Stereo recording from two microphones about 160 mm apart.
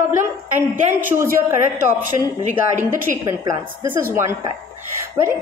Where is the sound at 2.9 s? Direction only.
20° right (ahead or behind).